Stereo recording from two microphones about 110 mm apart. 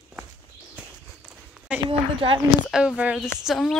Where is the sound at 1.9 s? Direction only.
55° right (ahead or behind).